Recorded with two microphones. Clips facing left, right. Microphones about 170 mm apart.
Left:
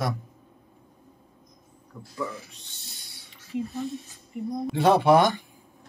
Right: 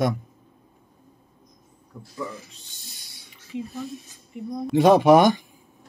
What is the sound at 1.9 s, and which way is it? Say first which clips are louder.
Speech: right 1 dB; 10° right (ahead or behind).